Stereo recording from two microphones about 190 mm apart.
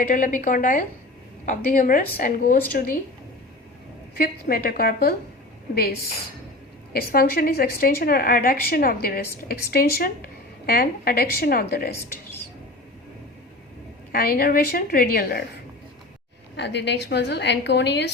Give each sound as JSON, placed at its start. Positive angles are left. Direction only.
{"t": 0.1, "sound": "a woman's voice", "side_deg": 45}
{"t": 4.2, "sound": "a woman's voice", "side_deg": 50}
{"t": 14.1, "sound": "a woman's voice", "side_deg": 50}
{"t": 16.6, "sound": "a woman's voice", "side_deg": 65}